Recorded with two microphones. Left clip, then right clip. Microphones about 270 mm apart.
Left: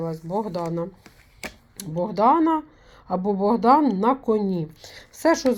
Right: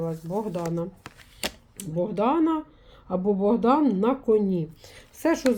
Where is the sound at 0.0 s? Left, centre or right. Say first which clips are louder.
Left 2 dB; left.